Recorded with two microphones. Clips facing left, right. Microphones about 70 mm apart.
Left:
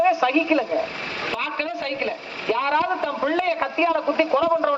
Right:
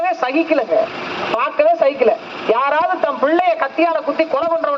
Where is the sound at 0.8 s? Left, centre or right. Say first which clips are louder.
Right 8 dB; right.